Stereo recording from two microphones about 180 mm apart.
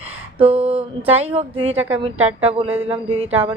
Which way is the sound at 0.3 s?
30° right (ahead or behind).